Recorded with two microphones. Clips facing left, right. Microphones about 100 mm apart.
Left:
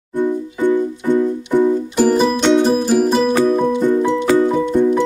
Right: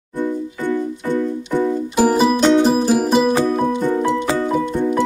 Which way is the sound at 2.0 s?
10° right (ahead or behind).